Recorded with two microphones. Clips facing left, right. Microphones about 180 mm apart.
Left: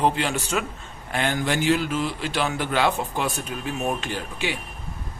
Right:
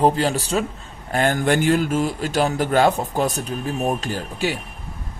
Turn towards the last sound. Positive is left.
turn(degrees=-40)  # may be behind; listen again after turning